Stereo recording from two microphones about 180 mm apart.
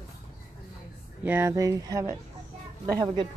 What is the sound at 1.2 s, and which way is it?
Speech, 15° right (ahead or behind).